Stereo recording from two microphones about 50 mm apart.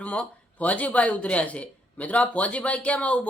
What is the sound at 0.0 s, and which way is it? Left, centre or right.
Speech, left.